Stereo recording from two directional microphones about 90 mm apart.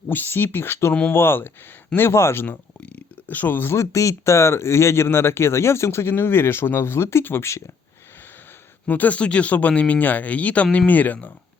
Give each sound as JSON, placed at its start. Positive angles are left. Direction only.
{"t": 0.1, "sound": "speech", "side_deg": 25}
{"t": 8.9, "sound": "speech", "side_deg": 20}